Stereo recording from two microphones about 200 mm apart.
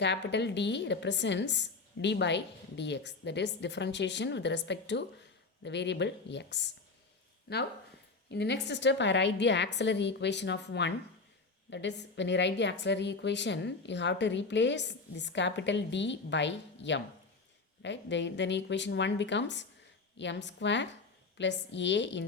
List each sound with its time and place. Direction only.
0.0 s a woman's voice: 60° left (ahead or behind)